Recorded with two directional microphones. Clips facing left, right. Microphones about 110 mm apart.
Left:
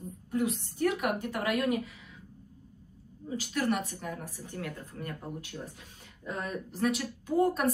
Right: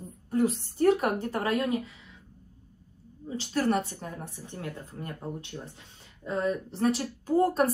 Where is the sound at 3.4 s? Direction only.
35° right (ahead or behind).